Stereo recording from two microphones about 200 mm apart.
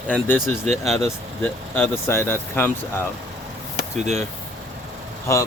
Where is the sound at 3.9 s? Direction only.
35° right (ahead or behind).